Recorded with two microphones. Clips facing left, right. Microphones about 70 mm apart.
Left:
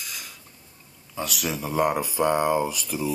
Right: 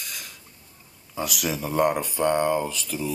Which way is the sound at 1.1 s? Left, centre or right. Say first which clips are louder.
Right 1 dB; centre.